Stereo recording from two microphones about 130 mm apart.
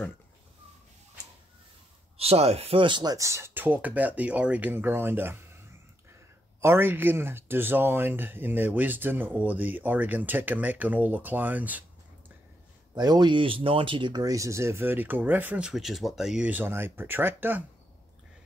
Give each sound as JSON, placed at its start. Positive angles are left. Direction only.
{"t": 2.1, "sound": "speech", "side_deg": -50}
{"t": 6.6, "sound": "speech", "side_deg": -20}
{"t": 12.9, "sound": "speech", "side_deg": -30}